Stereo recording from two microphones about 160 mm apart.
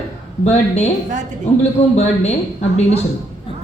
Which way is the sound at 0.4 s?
45° left (ahead or behind).